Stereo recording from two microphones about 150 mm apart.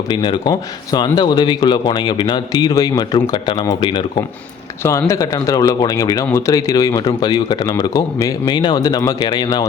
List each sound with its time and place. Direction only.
0.1 s speech: 30° left (ahead or behind)
4.8 s speech: 20° left (ahead or behind)